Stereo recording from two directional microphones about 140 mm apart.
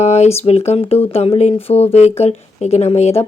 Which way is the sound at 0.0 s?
55° left (ahead or behind).